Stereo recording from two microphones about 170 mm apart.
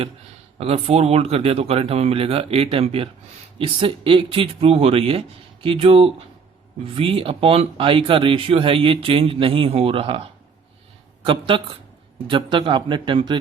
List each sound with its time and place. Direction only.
0.6 s speech: 35° right (ahead or behind)
11.3 s a man's voice: 30° right (ahead or behind)